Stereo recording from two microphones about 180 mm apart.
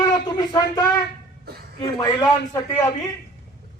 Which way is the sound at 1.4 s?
60° right (ahead or behind).